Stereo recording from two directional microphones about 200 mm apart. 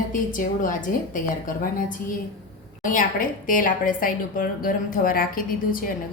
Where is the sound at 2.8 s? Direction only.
40° left (ahead or behind).